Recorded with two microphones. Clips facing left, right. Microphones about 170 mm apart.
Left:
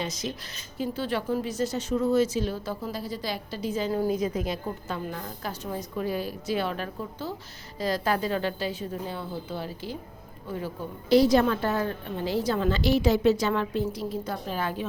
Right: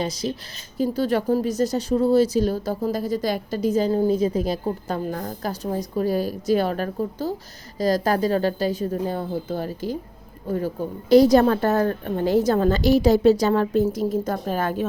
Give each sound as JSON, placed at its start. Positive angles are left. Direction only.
{"t": 0.0, "sound": "a woman's voice", "side_deg": -35}